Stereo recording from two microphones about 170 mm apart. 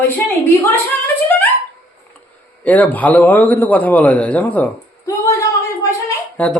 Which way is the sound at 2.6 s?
10° left (ahead or behind).